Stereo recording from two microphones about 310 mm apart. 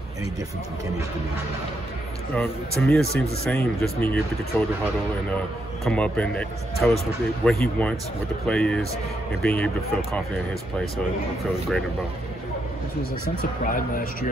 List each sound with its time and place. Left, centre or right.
2.3 s speech: centre
5.9 s speech: centre
13.7 s speech: left